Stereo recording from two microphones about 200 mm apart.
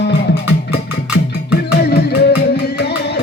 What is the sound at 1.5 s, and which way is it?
Music, 55° left (ahead or behind).